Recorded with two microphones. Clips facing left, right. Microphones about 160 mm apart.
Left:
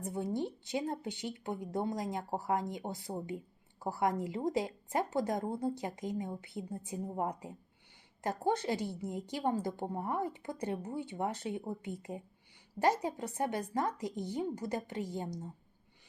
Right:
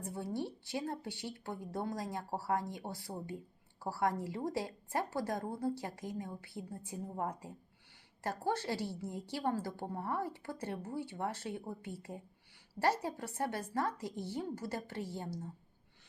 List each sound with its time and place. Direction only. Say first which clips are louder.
0.0 s a woman's voice: left 4 dB; 20° left (ahead or behind)